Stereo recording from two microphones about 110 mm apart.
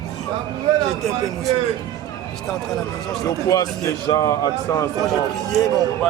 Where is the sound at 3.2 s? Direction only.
35° left (ahead or behind).